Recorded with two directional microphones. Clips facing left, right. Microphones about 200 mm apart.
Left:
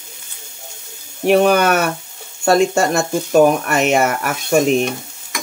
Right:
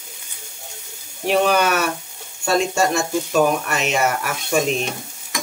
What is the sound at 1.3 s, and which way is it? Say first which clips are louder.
Speech: left 5 dB; 55° left (ahead or behind).